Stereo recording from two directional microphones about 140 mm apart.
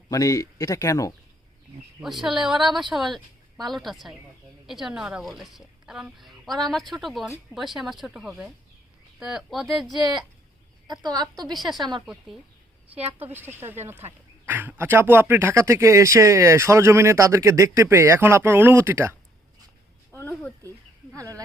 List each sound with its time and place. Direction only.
0.1 s speech: 25° left (ahead or behind)
2.0 s a woman's voice: centre (ahead or behind)
9.9 s speech: 30° right (ahead or behind)
11.5 s a woman's voice: centre (ahead or behind)
13.3 s speech: 15° right (ahead or behind)
20.1 s a sound: 10° left (ahead or behind)
21.2 s speech: 25° right (ahead or behind)